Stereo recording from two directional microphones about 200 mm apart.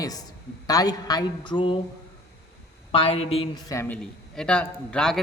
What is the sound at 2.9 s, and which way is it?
Speech, 30° left (ahead or behind).